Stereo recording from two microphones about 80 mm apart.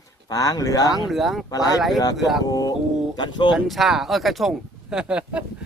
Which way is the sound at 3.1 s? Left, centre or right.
Left.